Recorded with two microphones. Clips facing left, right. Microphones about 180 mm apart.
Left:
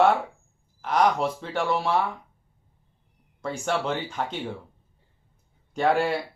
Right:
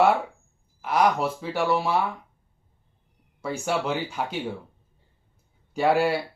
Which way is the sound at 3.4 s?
5° right (ahead or behind).